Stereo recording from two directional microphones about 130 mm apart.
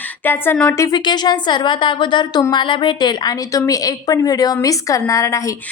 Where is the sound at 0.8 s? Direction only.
35° left (ahead or behind).